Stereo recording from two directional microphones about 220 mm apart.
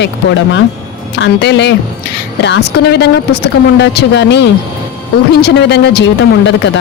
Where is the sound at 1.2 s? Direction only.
50° left (ahead or behind).